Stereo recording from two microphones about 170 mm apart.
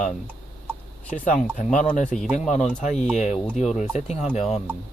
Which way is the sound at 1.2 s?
50° left (ahead or behind).